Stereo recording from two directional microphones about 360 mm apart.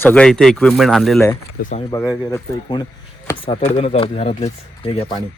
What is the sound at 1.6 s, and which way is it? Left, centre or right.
Speech, left.